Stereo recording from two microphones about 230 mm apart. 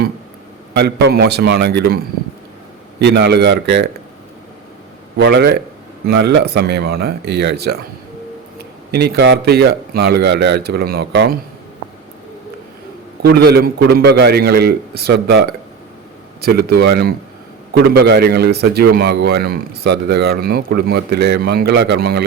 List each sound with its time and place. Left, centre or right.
0.7 s a man's voice: right
3.0 s a man's voice: right
5.1 s a man's voice: right
13.2 s a man's voice: right